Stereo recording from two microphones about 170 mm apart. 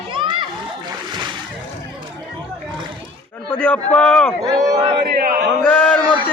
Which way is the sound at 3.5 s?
5° left (ahead or behind).